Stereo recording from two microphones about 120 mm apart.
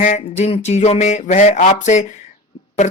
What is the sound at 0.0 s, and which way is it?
Speech, 80° left.